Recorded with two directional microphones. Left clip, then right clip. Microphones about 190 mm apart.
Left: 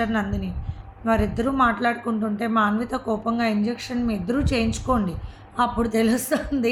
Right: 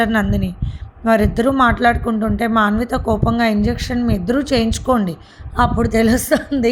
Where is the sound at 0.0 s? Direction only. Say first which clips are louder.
Right 8 dB; 45° right (ahead or behind).